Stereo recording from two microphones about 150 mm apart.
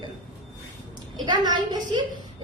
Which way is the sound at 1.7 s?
30° right (ahead or behind).